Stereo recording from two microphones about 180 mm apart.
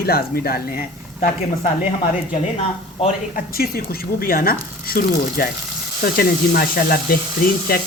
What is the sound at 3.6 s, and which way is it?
Speech, 55° left (ahead or behind).